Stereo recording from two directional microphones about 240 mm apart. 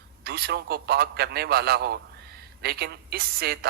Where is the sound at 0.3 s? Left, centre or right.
Right.